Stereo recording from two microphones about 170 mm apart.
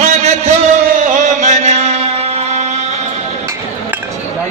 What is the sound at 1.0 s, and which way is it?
Music, 45° right (ahead or behind).